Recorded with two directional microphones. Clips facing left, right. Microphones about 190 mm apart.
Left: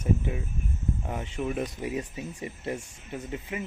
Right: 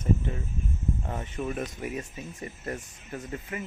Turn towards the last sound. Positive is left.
turn(degrees=15)  # may be behind; listen again after turning